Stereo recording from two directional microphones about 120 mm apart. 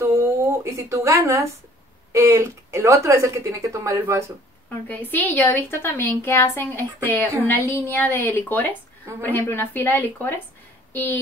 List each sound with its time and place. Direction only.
0.7 s a woman's voice: 25° right (ahead or behind)
4.8 s a woman's voice: 15° left (ahead or behind)